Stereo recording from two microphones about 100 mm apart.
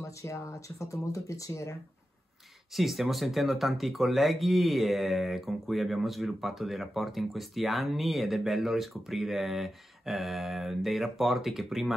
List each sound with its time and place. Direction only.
0.0 s speech: 30° left (ahead or behind)
2.7 s speech: centre (ahead or behind)